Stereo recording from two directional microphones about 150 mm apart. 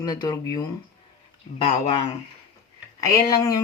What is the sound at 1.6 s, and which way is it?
Speech, 40° left (ahead or behind).